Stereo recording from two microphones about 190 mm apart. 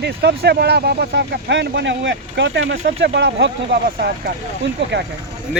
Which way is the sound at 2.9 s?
65° right (ahead or behind).